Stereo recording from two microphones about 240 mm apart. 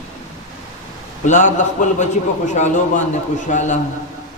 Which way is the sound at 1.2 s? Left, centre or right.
Left.